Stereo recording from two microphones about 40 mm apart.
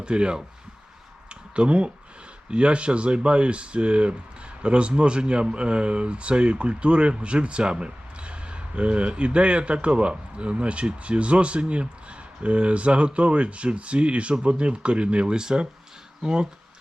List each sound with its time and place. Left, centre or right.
0.0 s speech: right
1.3 s a sound: right
2.5 s speech: right